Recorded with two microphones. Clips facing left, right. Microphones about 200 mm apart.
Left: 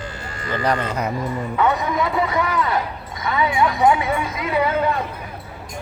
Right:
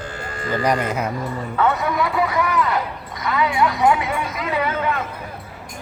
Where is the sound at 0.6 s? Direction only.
10° right (ahead or behind).